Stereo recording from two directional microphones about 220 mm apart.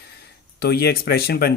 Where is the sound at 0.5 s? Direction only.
45° left (ahead or behind).